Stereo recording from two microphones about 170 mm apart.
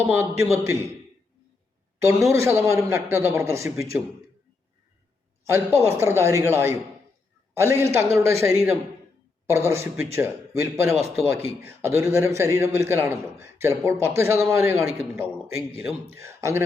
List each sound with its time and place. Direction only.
0.1 s a man's voice: 15° right (ahead or behind)
2.3 s a man's voice: 15° right (ahead or behind)
5.5 s a man's voice: 15° right (ahead or behind)